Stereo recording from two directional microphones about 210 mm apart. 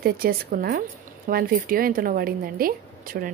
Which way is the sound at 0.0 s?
45° right (ahead or behind).